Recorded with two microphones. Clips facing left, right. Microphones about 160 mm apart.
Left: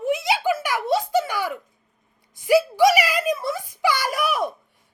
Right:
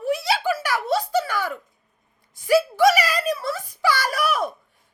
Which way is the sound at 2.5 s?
15° left (ahead or behind).